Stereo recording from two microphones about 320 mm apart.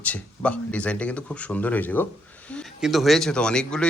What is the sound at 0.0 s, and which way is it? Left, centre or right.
Speech, centre.